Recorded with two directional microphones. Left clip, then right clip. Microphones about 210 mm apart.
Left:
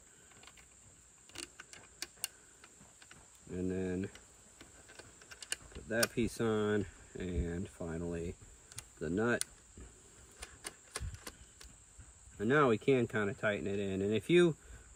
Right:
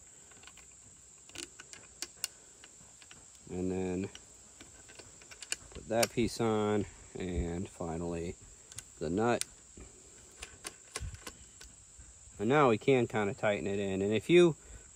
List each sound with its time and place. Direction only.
1.3 s a sound: centre (ahead or behind)
3.5 s a sound: 35° right (ahead or behind)
4.1 s typing: centre (ahead or behind)
6.3 s speech: 35° right (ahead or behind)
8.2 s computer keyboard: centre (ahead or behind)
9.0 s speech: 30° right (ahead or behind)
10.4 s typewriter: centre (ahead or behind)
12.4 s speech: 35° right (ahead or behind)
13.6 s speech: 5° right (ahead or behind)
13.8 s speech: 35° right (ahead or behind)